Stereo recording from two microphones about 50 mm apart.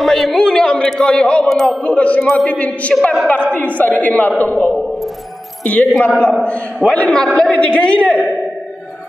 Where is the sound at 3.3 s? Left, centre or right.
Left.